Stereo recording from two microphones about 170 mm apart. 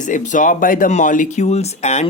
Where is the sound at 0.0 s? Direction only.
45° left (ahead or behind).